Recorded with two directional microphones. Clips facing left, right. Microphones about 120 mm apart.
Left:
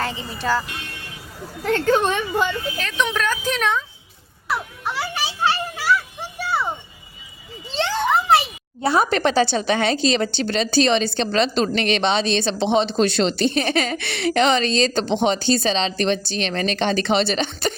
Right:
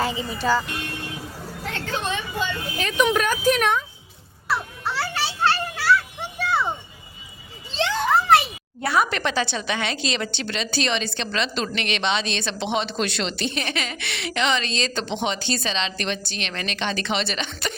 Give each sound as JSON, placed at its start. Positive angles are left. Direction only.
{"t": 0.0, "sound": "speech", "side_deg": -5}
{"t": 1.6, "sound": "a woman's voice", "side_deg": 45}
{"t": 2.7, "sound": "speech", "side_deg": -15}
{"t": 4.4, "sound": "children playing", "side_deg": 15}
{"t": 6.4, "sound": "a sound", "side_deg": 5}
{"t": 8.8, "sound": "speech", "side_deg": 30}